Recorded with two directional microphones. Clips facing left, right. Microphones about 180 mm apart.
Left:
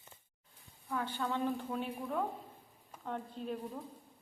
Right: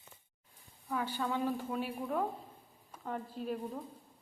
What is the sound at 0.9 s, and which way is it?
A woman's voice, 5° right (ahead or behind).